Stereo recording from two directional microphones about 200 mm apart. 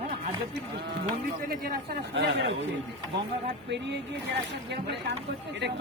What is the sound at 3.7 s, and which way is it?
Speech, 60° right (ahead or behind).